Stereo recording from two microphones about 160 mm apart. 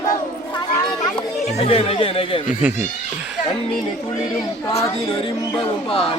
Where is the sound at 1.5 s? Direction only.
40° left (ahead or behind).